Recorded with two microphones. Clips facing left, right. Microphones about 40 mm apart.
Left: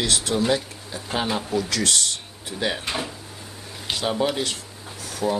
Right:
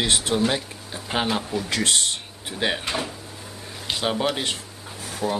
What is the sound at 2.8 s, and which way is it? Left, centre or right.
Speech, centre.